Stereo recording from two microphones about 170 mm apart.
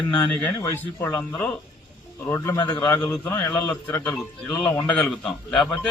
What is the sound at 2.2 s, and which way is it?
A man's voice, 15° left (ahead or behind).